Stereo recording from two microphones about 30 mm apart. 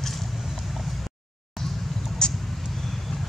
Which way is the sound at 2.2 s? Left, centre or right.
Left.